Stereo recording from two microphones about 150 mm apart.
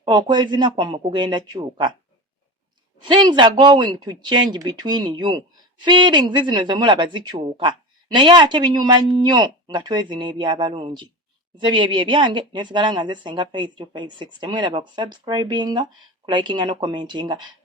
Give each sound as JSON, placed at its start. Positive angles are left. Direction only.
{"t": 0.1, "sound": "speech", "side_deg": -30}
{"t": 3.0, "sound": "speech", "side_deg": -30}